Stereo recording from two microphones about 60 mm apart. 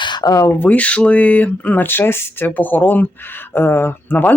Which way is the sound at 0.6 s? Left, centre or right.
Left.